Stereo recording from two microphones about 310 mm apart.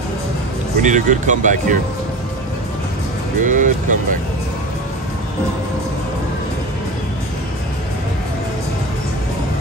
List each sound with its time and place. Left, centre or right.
0.8 s speech: right
3.3 s speech: right